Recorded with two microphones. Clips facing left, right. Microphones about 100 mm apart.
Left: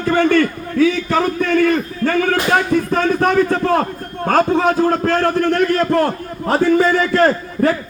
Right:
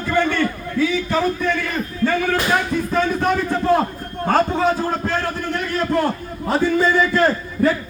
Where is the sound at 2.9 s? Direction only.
55° left (ahead or behind).